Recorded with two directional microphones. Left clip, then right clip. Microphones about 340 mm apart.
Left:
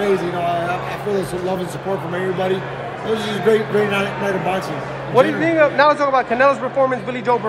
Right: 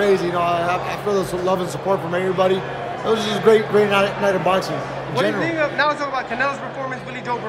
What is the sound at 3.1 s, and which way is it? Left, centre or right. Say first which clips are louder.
Speech: right 2 dB; centre.